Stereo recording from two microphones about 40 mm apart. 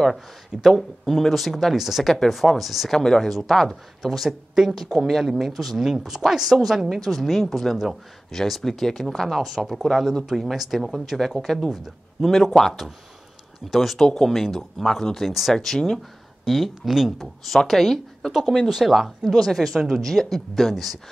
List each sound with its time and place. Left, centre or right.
0.1 s speech: centre
1.8 s speech: centre
2.1 s speech: centre
3.0 s speech: centre
5.8 s speech: centre
16.4 s speech: centre
18.6 s speech: centre